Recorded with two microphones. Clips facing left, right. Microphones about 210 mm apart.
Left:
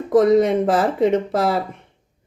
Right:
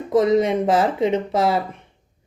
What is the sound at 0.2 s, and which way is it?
Speech, 55° left (ahead or behind).